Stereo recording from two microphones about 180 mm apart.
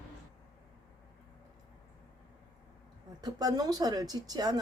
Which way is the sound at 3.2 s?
20° right (ahead or behind).